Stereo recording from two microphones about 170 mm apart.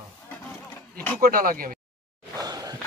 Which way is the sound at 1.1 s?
55° right (ahead or behind).